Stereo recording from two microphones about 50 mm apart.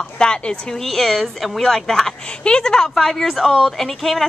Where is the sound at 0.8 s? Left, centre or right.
Centre.